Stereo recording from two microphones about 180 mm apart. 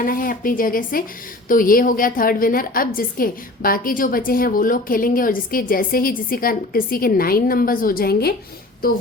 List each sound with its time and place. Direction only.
0.0 s a woman's voice: 50° left (ahead or behind)